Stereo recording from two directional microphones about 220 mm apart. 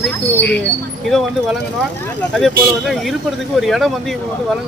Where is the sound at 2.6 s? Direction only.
Centre (ahead or behind).